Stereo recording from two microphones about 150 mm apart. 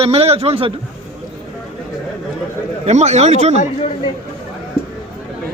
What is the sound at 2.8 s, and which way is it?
Speech, 50° right (ahead or behind).